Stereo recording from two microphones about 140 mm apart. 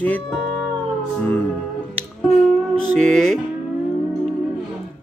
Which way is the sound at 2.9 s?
5° left (ahead or behind).